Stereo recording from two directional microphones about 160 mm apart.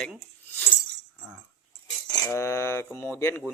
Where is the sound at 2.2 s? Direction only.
15° left (ahead or behind).